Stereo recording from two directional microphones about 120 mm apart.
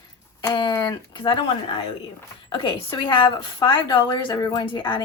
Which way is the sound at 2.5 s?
40° left (ahead or behind).